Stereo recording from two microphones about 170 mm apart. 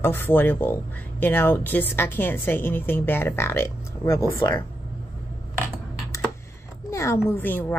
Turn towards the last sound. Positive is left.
turn(degrees=10)  # may be behind; listen again after turning